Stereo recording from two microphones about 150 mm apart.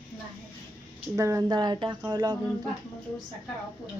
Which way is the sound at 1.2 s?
25° right (ahead or behind).